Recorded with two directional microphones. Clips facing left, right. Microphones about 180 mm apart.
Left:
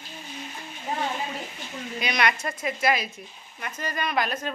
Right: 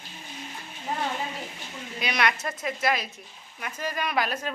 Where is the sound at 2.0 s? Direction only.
Centre (ahead or behind).